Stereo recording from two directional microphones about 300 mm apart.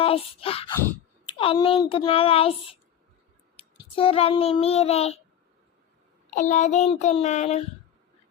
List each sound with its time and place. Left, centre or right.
0.0 s child singing: centre
0.9 s speech: centre
3.6 s child singing: centre
6.3 s child singing: left